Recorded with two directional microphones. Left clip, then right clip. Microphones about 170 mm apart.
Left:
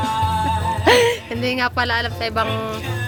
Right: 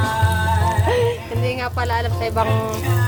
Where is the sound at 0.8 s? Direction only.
55° left (ahead or behind).